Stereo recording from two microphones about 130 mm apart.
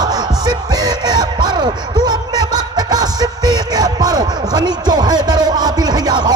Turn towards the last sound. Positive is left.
turn(degrees=-35)  # may be behind; listen again after turning